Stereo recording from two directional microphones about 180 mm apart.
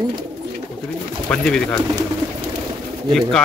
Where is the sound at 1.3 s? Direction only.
5° left (ahead or behind).